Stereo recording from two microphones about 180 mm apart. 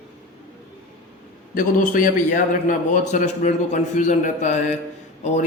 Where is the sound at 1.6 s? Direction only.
50° left (ahead or behind).